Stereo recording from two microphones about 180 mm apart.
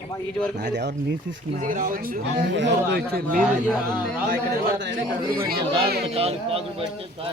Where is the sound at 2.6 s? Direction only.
75° right (ahead or behind).